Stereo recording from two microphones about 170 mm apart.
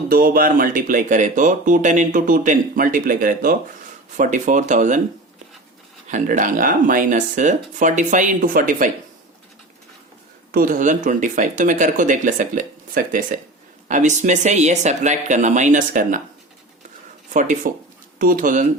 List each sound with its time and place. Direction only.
0.1 s speech: 60° right (ahead or behind)
6.1 s speech: 45° right (ahead or behind)
10.5 s speech: 55° right (ahead or behind)
17.3 s speech: 50° right (ahead or behind)